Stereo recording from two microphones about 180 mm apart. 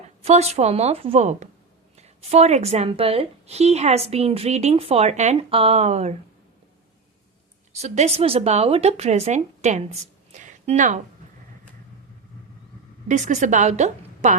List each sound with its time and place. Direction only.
0.2 s a woman's voice: 35° right (ahead or behind)
7.7 s speech: 40° right (ahead or behind)
13.1 s a woman's voice: 40° right (ahead or behind)